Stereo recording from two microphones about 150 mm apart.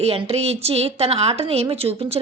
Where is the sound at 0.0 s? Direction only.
40° right (ahead or behind).